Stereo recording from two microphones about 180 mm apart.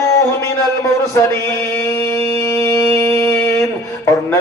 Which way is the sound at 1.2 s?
15° left (ahead or behind).